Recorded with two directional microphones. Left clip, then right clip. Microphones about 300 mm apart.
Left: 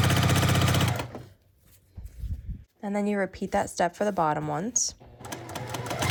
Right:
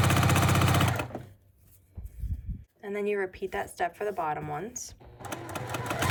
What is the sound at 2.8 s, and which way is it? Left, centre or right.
A woman's voice, centre.